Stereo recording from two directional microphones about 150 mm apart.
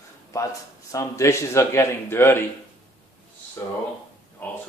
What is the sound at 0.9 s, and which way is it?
Speech, 20° left (ahead or behind).